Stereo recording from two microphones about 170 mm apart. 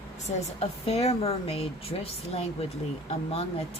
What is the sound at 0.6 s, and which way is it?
Speech, 35° left (ahead or behind).